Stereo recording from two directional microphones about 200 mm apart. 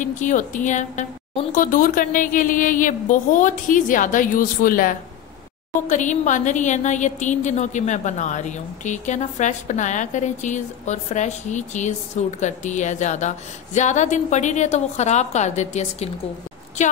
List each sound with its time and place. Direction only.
0.0 s a woman's voice: 40° left (ahead or behind)